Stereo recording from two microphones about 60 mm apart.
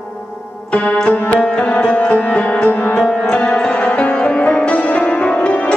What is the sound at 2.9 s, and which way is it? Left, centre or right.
Music, centre.